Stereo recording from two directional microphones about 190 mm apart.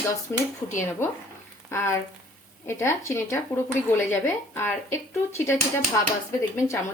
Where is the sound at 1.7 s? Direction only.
15° left (ahead or behind).